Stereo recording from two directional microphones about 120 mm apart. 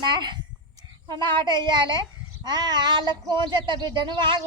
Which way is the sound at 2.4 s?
35° right (ahead or behind).